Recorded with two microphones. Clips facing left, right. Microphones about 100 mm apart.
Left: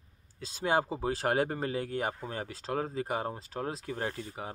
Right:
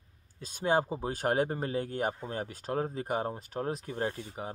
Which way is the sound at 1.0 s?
30° right (ahead or behind).